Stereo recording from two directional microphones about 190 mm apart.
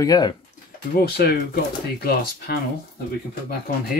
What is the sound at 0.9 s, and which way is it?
Speech, 55° left (ahead or behind).